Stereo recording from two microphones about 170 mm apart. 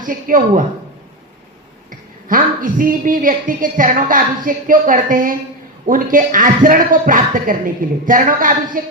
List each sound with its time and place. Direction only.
0.0 s a woman's voice: 50° right (ahead or behind)
1.9 s a woman's voice: 55° right (ahead or behind)